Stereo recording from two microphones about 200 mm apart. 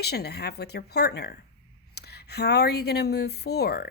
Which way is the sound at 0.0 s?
55° left (ahead or behind).